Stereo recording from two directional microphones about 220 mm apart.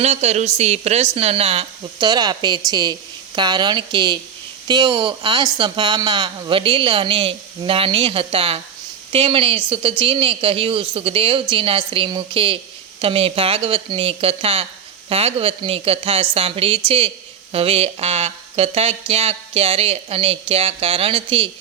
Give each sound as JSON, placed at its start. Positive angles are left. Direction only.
{"t": 0.0, "sound": "speech", "side_deg": -30}